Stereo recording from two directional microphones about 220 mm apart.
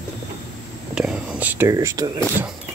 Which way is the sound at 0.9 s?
5° right (ahead or behind).